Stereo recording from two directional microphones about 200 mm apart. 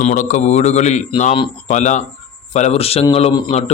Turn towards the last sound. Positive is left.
turn(degrees=30)  # may be behind; listen again after turning